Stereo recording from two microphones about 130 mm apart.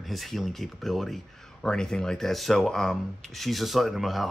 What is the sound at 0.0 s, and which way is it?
Speech, centre (ahead or behind).